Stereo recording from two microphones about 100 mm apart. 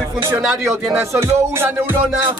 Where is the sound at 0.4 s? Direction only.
Centre (ahead or behind).